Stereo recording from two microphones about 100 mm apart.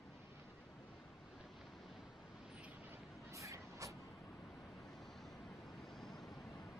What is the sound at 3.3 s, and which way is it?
Vehicle, 30° right (ahead or behind).